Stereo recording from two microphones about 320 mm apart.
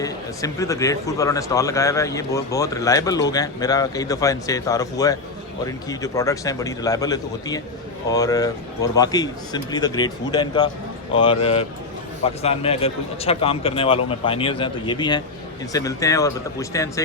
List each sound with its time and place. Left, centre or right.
0.0 s a man's voice: centre